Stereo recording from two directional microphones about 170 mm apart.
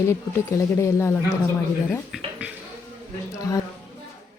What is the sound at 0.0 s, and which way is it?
Speech, 15° left (ahead or behind).